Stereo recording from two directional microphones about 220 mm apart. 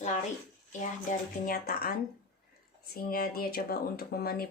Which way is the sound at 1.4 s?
40° left (ahead or behind).